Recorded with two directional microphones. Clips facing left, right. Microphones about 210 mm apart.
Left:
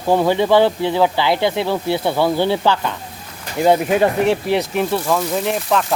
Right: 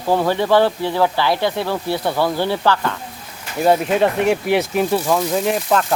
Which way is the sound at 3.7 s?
Centre (ahead or behind).